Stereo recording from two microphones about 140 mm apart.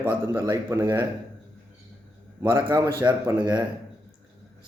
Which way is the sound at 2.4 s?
25° right (ahead or behind).